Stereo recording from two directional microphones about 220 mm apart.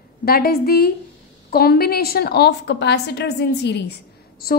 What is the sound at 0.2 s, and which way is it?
A woman's voice, 45° left (ahead or behind).